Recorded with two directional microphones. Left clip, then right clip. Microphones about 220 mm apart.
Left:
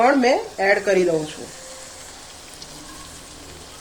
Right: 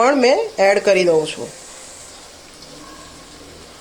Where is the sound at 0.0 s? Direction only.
30° right (ahead or behind).